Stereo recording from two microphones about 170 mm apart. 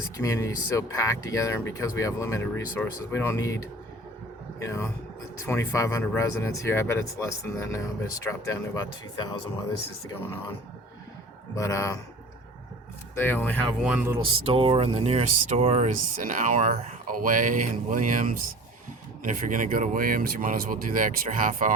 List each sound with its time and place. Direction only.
0.2 s speech: 20° left (ahead or behind)
11.5 s speech: 20° left (ahead or behind)
13.1 s speech: 10° left (ahead or behind)
13.8 s speech: 10° right (ahead or behind)
14.4 s speech: 35° right (ahead or behind); by 21.8 s 50° right (ahead or behind)